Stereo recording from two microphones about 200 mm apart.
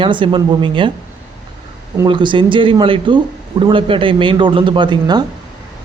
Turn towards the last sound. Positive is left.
turn(degrees=-20)  # may be behind; listen again after turning